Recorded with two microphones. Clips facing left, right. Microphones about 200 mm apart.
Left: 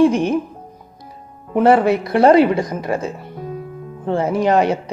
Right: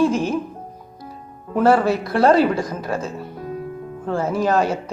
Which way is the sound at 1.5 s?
20° left (ahead or behind).